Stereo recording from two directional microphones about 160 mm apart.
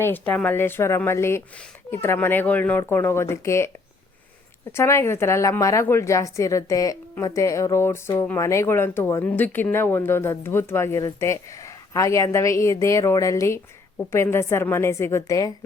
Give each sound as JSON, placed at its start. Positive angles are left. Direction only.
{"t": 0.0, "sound": "a woman's voice", "side_deg": 10}
{"t": 4.7, "sound": "a woman's voice", "side_deg": 15}